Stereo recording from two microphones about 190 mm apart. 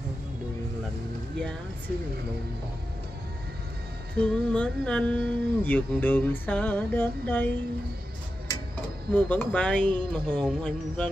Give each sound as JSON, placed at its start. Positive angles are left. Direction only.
{"t": 4.2, "sound": "speech", "side_deg": 5}
{"t": 9.1, "sound": "speech", "side_deg": 10}
{"t": 9.8, "sound": "speech", "side_deg": -25}
{"t": 10.3, "sound": "speech", "side_deg": 5}